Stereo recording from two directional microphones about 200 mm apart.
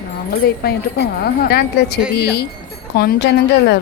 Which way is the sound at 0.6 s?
50° left (ahead or behind).